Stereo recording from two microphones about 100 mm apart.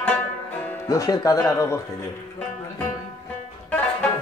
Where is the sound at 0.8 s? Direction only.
35° left (ahead or behind).